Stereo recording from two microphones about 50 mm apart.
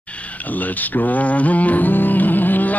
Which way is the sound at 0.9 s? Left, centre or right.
Left.